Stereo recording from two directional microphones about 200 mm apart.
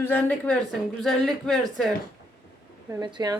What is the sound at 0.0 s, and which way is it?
Music, 10° left (ahead or behind).